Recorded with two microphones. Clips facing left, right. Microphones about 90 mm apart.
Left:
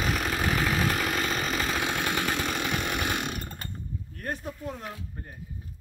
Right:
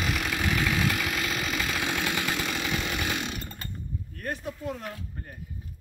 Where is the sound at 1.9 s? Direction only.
40° left (ahead or behind).